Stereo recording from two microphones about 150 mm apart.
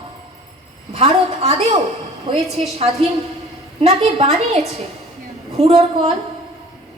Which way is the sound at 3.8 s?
45° right (ahead or behind).